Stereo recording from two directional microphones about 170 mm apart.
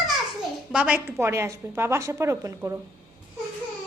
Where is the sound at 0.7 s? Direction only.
5° right (ahead or behind).